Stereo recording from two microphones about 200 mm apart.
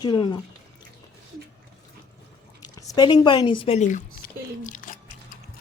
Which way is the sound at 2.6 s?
20° left (ahead or behind).